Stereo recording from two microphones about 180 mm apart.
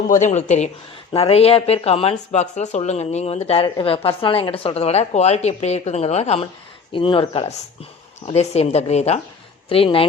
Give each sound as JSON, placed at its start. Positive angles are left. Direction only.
{"t": 0.1, "sound": "speech", "side_deg": 40}